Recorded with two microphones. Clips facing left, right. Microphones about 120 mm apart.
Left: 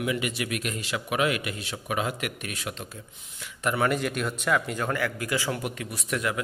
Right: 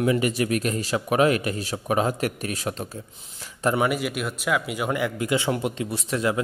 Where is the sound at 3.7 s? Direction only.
10° right (ahead or behind).